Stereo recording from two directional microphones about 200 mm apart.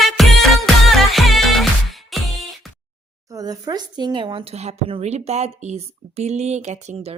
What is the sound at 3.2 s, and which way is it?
Speech, 15° right (ahead or behind).